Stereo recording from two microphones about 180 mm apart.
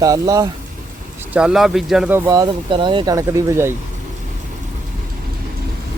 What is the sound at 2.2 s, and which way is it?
Speech, 20° right (ahead or behind).